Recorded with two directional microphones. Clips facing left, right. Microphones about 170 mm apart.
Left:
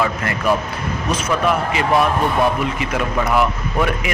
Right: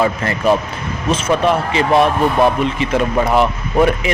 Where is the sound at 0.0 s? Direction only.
30° right (ahead or behind).